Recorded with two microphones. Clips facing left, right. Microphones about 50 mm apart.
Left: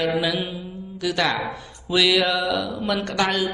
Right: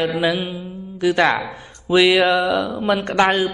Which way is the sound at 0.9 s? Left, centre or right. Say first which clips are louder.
Right 6 dB; right.